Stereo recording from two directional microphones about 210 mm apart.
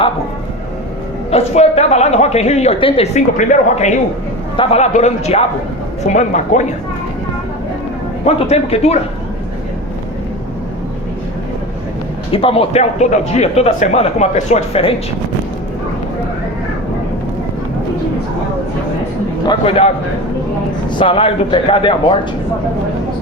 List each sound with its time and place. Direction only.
1.3 s a woman's voice: 30° left (ahead or behind)
8.2 s a woman's voice: 30° left (ahead or behind)
12.3 s a woman's voice: 25° left (ahead or behind)
19.5 s a man's voice: 25° left (ahead or behind)
21.0 s a man's voice: 25° left (ahead or behind)